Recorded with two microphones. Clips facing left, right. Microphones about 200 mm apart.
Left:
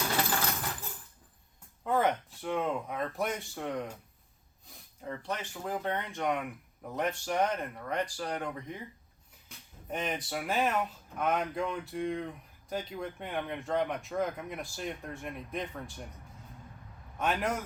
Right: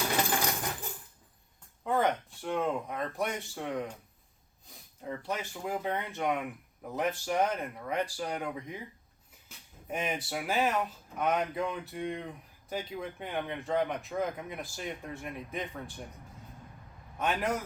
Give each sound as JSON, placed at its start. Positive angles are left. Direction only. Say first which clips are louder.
{"t": 0.3, "sound": "tambourine", "louder": "right 1 dB", "side_deg": -15}
{"t": 1.8, "sound": "speech", "louder": "even", "side_deg": 0}
{"t": 17.2, "sound": "speech", "louder": "even", "side_deg": 0}